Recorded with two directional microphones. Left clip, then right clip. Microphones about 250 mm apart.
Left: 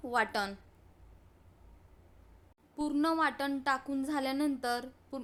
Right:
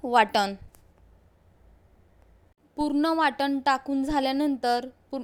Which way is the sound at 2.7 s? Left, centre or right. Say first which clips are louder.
Right 6 dB; right.